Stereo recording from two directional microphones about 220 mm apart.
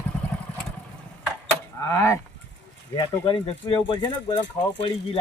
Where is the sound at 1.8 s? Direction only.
15° left (ahead or behind).